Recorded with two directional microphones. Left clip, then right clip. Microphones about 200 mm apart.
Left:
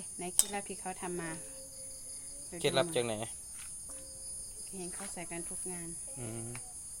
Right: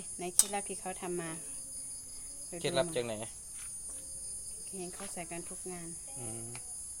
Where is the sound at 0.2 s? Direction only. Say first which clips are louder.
Right 2 dB; 20° right (ahead or behind).